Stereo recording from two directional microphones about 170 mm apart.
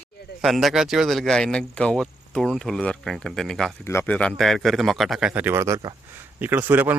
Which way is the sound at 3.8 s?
15° left (ahead or behind).